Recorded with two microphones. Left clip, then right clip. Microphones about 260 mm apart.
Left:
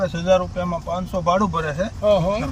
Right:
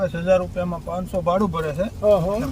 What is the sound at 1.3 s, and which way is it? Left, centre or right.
Speech, centre.